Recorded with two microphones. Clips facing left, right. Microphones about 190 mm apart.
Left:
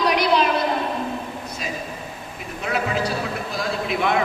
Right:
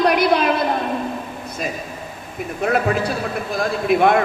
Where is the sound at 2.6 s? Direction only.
50° right (ahead or behind).